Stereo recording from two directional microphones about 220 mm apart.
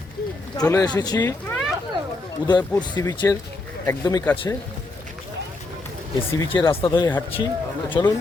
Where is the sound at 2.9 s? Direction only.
20° left (ahead or behind).